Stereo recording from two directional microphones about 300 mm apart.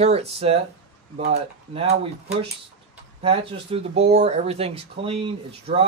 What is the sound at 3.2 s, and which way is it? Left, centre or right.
A man's voice, centre.